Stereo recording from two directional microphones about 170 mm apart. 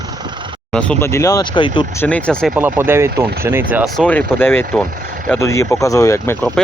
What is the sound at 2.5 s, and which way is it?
Speech, 15° right (ahead or behind).